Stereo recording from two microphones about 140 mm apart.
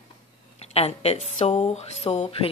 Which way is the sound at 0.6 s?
45° left (ahead or behind).